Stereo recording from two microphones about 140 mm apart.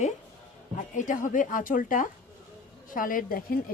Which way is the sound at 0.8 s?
65° left (ahead or behind).